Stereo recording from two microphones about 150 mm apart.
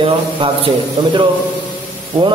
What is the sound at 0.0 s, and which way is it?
A man's voice, 35° right (ahead or behind).